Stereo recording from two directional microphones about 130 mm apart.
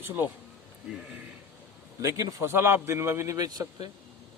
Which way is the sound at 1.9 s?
20° right (ahead or behind).